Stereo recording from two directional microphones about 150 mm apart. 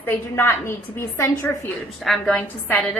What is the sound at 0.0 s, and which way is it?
A woman's voice, 15° left (ahead or behind).